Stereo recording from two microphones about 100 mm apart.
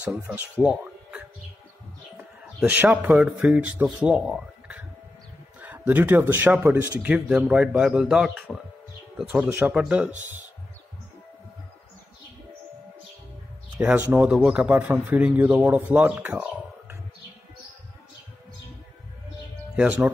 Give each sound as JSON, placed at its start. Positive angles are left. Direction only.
{"t": 0.3, "sound": "a man's voice", "side_deg": -10}
{"t": 7.2, "sound": "speech", "side_deg": -5}
{"t": 9.3, "sound": "a man's voice", "side_deg": -20}
{"t": 13.7, "sound": "speech", "side_deg": -15}
{"t": 19.7, "sound": "speech", "side_deg": -15}